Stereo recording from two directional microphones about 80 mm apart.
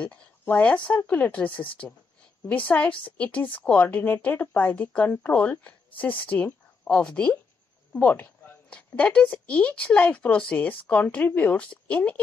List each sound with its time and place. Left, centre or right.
0.0 s a woman's voice: centre